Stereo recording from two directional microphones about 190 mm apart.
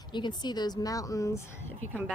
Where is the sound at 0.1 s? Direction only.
25° left (ahead or behind).